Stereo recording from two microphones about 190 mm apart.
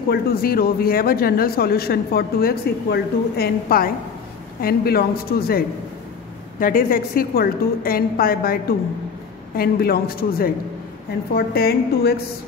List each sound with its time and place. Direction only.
0.1 s a man's voice: 50° left (ahead or behind)
6.6 s a man's voice: 50° left (ahead or behind)